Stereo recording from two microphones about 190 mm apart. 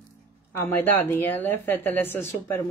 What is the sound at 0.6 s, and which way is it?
Speech, 10° left (ahead or behind).